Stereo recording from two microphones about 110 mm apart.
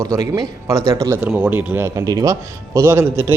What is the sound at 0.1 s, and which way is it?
Speech, 30° right (ahead or behind).